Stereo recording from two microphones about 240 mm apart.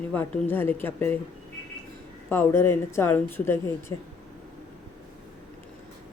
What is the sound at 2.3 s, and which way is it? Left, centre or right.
Speech, centre.